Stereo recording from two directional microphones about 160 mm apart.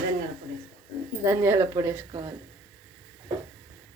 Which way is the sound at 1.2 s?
15° right (ahead or behind).